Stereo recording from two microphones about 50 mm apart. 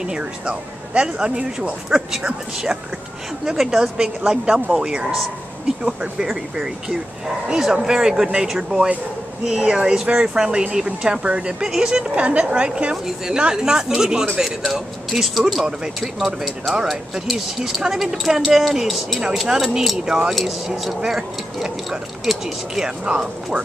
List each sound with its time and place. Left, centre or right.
0.0 s a woman's voice: centre
12.9 s speech: centre
15.6 s speech: centre
20.1 s speech: centre
20.3 s speech: centre
22.8 s speech: centre